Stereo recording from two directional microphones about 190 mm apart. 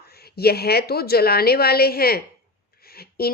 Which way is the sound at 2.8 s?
55° left (ahead or behind).